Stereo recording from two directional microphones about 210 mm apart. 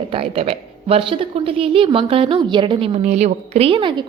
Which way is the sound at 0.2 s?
25° right (ahead or behind).